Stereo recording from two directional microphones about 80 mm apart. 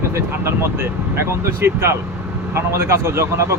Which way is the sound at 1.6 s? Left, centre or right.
Right.